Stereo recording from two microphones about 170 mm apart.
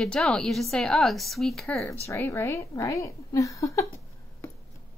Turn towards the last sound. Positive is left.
turn(degrees=20)  # may be behind; listen again after turning